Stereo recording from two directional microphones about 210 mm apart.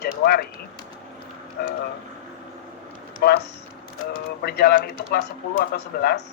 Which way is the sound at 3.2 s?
50° left (ahead or behind).